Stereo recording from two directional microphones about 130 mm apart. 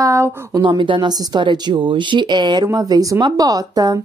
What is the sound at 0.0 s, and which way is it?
Speech, 20° right (ahead or behind).